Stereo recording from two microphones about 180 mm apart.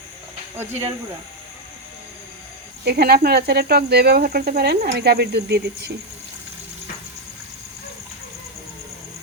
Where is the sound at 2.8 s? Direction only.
65° right (ahead or behind).